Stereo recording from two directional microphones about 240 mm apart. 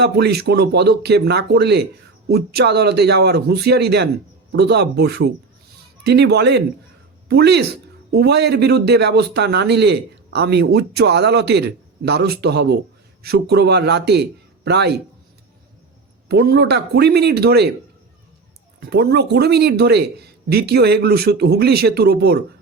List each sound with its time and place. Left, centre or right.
0.0 s speech: right
16.3 s speech: right
18.8 s speech: right